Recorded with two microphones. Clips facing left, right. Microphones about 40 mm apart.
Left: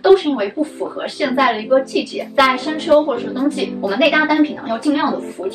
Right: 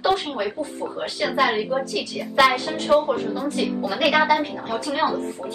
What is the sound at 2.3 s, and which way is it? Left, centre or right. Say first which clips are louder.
Speech: left 3 dB; left.